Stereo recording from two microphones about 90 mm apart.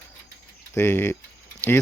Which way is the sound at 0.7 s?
25° left (ahead or behind).